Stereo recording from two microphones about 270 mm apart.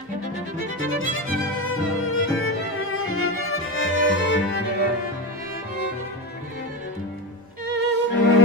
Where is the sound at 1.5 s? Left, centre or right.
Left.